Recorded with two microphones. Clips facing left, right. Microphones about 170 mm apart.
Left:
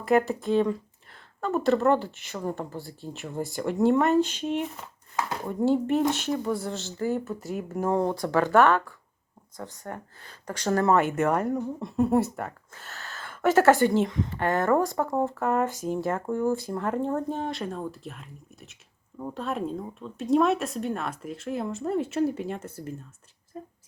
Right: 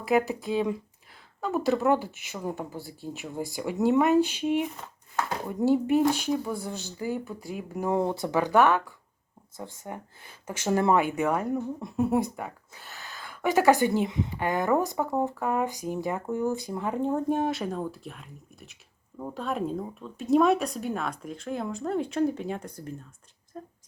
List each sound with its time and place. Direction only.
0.0 s speech: 5° right (ahead or behind)
7.3 s speech: centre (ahead or behind)
8.1 s speech: 20° right (ahead or behind)
9.8 s speech: 10° right (ahead or behind)
12.7 s a sound: 15° right (ahead or behind)
13.7 s speech: 15° right (ahead or behind); by 23.7 s 5° left (ahead or behind)